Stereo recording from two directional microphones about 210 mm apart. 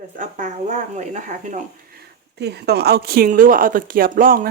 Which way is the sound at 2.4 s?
50° right (ahead or behind).